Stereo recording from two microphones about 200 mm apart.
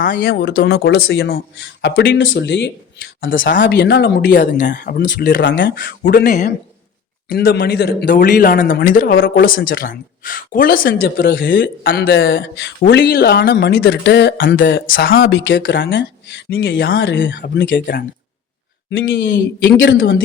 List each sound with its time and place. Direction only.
0.0 s speech: 45° left (ahead or behind); by 2.7 s 60° left (ahead or behind)
3.2 s speech: 70° left (ahead or behind)
3.5 s speech: 50° left (ahead or behind); by 5.8 s 65° left (ahead or behind)
5.8 s speech: 50° left (ahead or behind); by 16.4 s 70° left (ahead or behind)
16.5 s speech: 50° left (ahead or behind)
17.0 s speech: 65° left (ahead or behind)
18.9 s speech: 75° left (ahead or behind)